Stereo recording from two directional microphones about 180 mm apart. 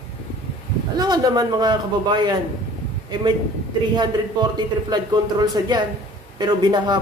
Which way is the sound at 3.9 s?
25° right (ahead or behind).